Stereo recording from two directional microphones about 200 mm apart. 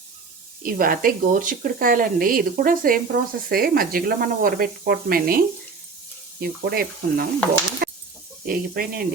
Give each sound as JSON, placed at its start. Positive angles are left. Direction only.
{"t": 0.6, "sound": "speech", "side_deg": -45}
{"t": 7.8, "sound": "chicken", "side_deg": -50}
{"t": 8.4, "sound": "speech", "side_deg": -45}